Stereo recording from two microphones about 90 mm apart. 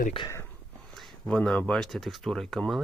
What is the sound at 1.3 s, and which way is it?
Speech, 10° left (ahead or behind).